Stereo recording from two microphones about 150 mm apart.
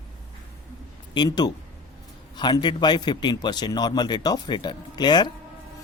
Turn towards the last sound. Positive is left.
turn(degrees=30)  # may be behind; listen again after turning